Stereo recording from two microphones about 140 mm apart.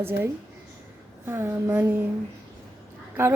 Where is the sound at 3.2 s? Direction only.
15° right (ahead or behind).